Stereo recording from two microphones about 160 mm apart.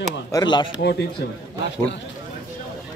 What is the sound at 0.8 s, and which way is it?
Speech, 90° left.